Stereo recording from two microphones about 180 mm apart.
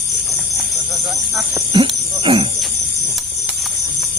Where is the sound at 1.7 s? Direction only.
30° right (ahead or behind).